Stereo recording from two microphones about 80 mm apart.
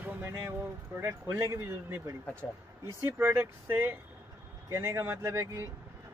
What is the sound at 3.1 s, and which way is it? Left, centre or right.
Speech, right.